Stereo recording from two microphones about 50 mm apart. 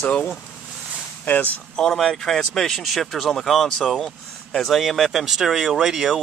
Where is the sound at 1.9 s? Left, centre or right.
Centre.